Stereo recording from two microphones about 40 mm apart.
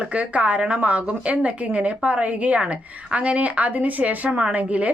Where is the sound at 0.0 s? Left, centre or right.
Right.